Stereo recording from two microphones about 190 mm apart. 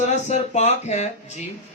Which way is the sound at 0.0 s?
40° left (ahead or behind).